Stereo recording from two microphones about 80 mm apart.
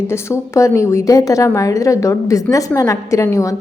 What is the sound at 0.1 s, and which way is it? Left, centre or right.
A woman's voice, left.